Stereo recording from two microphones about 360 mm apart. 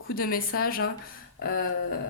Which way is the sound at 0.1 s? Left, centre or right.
Left.